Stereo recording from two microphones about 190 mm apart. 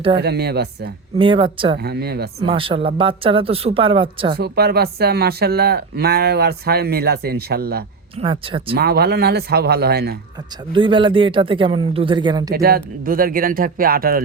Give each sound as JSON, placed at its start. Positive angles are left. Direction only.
{"t": 0.2, "sound": "speech", "side_deg": -55}
{"t": 1.2, "sound": "speech", "side_deg": -25}
{"t": 1.8, "sound": "speech", "side_deg": -55}
{"t": 2.4, "sound": "speech", "side_deg": -30}
{"t": 4.4, "sound": "speech", "side_deg": -55}
{"t": 8.2, "sound": "speech", "side_deg": -25}
{"t": 8.7, "sound": "speech", "side_deg": -55}
{"t": 10.7, "sound": "speech", "side_deg": -25}
{"t": 12.5, "sound": "speech", "side_deg": -50}